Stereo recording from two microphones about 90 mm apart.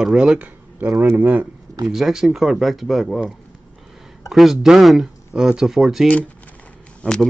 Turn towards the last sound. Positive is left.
turn(degrees=10)  # may be behind; listen again after turning